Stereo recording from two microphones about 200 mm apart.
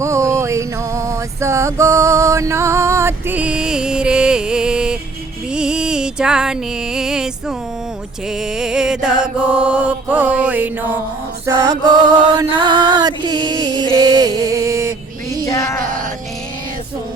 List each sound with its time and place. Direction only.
0.0 s a sound: 15° right (ahead or behind)
5.5 s music: 5° right (ahead or behind)
8.5 s mantra: 5° right (ahead or behind)
11.4 s music: 20° right (ahead or behind)
15.4 s music: 15° left (ahead or behind)